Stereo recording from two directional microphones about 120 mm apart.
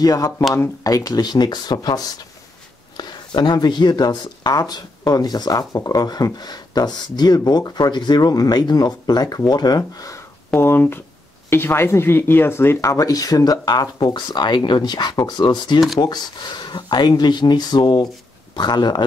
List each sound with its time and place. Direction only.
0.0 s speech: 30° left (ahead or behind)
10.6 s speech: 20° left (ahead or behind); by 19.0 s 40° left (ahead or behind)